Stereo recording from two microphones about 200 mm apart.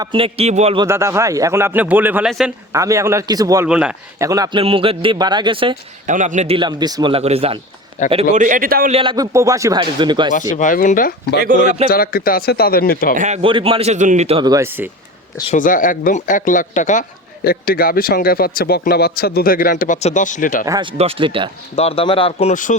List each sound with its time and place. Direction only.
0.0 s speech: 25° right (ahead or behind)
0.9 s a man's voice: 15° right (ahead or behind)
3.7 s speech: 5° right (ahead or behind)
4.3 s speech: 20° right (ahead or behind)
6.1 s speech: 40° right (ahead or behind)
8.3 s speech: 40° right (ahead or behind)
8.9 s speech: 25° right (ahead or behind)
10.5 s speech: 40° left (ahead or behind)
11.3 s speech: 45° right (ahead or behind)
11.9 s speech: 45° left (ahead or behind)
13.1 s speech: 35° right (ahead or behind); by 14.8 s 10° right (ahead or behind)
15.5 s speech: 40° left (ahead or behind)
20.7 s speech: 20° right (ahead or behind)
21.8 s speech: 30° left (ahead or behind)